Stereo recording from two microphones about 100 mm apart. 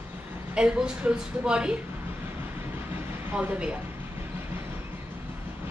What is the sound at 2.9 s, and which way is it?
Train, 20° right (ahead or behind).